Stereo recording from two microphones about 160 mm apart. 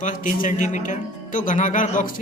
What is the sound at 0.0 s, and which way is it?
A man's voice, 55° left (ahead or behind).